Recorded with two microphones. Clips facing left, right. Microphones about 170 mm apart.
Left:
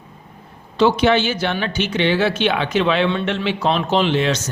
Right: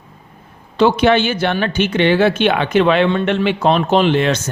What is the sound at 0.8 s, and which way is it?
Speech, 55° right (ahead or behind).